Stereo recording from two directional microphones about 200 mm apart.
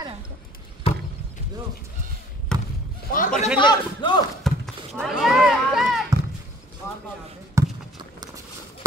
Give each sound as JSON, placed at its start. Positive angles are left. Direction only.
{"t": 2.5, "sound": "basketball bounce", "side_deg": 5}
{"t": 3.1, "sound": "a sound", "side_deg": 45}
{"t": 3.5, "sound": "a man's voice", "side_deg": 25}
{"t": 4.4, "sound": "horse", "side_deg": 0}
{"t": 5.0, "sound": "run", "side_deg": 0}
{"t": 7.5, "sound": "basketball bounce", "side_deg": -20}